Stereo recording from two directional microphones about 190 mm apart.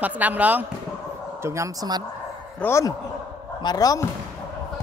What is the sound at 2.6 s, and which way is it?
Speech, 15° left (ahead or behind).